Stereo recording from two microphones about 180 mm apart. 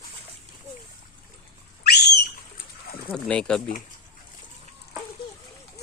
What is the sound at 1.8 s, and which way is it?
Bird, 60° left (ahead or behind).